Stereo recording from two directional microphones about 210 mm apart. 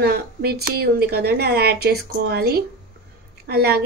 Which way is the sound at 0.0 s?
50° right (ahead or behind).